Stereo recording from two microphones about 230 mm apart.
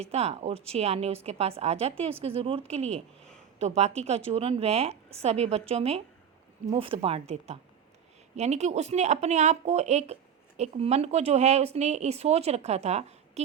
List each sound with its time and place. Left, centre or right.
0.0 s speech: right
2.9 s speech: centre
3.8 s speech: right